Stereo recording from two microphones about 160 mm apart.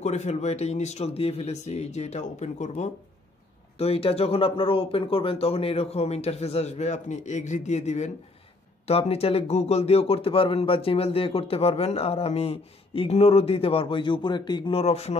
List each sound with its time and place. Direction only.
0.0 s speech: 45° left (ahead or behind)